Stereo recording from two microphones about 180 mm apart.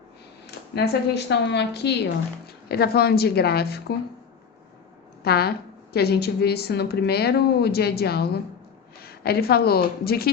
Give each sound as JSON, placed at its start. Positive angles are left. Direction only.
{"t": 0.7, "sound": "a woman's voice", "side_deg": 70}
{"t": 5.2, "sound": "speech", "side_deg": 60}